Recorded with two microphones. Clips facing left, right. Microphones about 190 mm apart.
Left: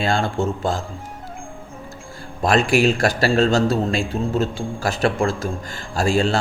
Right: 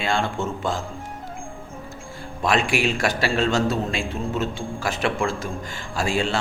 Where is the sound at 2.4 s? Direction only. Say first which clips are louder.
Left 5 dB; 40° left (ahead or behind).